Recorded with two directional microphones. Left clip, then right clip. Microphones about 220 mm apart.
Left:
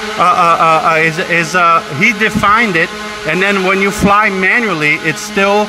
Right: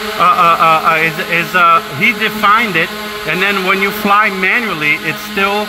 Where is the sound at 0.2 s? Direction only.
30° left (ahead or behind).